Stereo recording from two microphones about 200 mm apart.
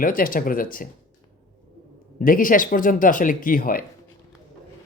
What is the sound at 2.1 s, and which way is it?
Speech, 45° left (ahead or behind).